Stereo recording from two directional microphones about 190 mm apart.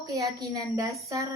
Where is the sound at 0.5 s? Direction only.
15° right (ahead or behind).